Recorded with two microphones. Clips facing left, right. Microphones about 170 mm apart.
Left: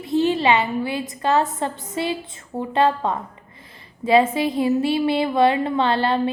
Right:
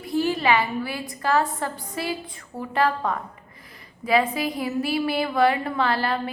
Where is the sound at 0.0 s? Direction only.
20° left (ahead or behind).